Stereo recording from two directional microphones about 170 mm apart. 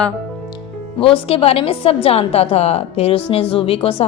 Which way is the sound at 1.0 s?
30° left (ahead or behind).